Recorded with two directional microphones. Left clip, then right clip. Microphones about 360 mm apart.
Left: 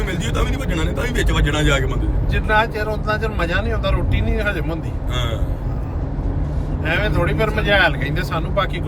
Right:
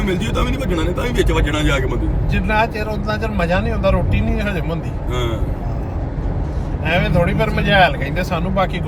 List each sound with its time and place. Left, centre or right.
0.3 s speech: centre
6.8 s speech: centre